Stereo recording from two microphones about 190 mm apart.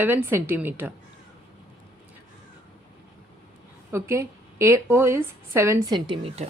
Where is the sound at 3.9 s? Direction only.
15° right (ahead or behind).